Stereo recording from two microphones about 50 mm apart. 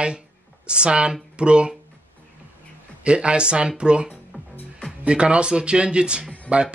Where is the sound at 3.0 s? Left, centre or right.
Right.